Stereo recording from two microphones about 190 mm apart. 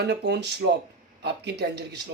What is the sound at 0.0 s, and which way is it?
Speech, 60° right (ahead or behind).